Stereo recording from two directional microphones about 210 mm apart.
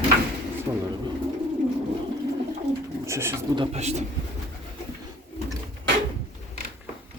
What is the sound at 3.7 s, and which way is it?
Speech, 30° right (ahead or behind).